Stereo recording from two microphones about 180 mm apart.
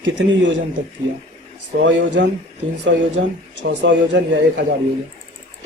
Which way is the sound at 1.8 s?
90° right.